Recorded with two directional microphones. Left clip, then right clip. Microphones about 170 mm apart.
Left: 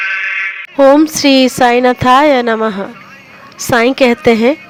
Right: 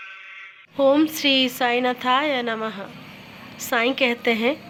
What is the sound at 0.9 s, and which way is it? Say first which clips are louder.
Speech: left 10 dB; 55° left (ahead or behind).